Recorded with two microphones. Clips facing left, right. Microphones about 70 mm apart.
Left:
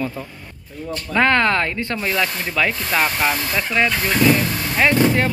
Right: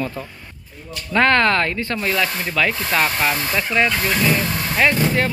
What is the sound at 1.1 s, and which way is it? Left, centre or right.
Speech, centre.